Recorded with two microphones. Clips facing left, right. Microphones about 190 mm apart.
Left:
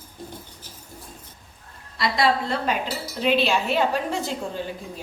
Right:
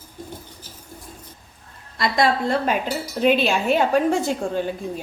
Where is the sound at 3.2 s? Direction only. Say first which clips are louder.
Right 3 dB; 50° right (ahead or behind).